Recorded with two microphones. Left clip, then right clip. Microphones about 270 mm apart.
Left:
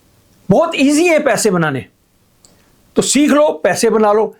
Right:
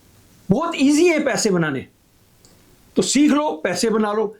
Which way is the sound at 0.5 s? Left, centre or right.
Left.